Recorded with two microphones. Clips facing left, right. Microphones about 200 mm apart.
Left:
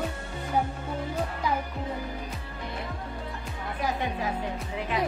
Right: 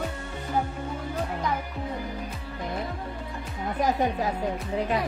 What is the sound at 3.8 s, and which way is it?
Speech, 40° right (ahead or behind).